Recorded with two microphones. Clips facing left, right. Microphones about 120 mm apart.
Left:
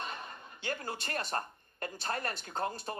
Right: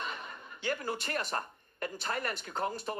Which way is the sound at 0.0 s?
40° left (ahead or behind).